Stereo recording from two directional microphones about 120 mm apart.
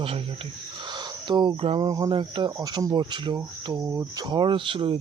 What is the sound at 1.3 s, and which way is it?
Speech, 40° right (ahead or behind).